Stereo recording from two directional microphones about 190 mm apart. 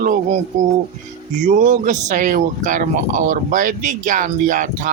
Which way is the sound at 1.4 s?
40° right (ahead or behind).